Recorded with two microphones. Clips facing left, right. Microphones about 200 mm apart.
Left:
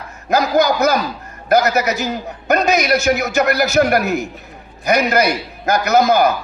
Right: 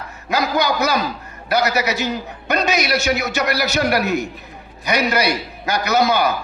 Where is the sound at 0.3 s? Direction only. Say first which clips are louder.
Left 5 dB; 45° left (ahead or behind).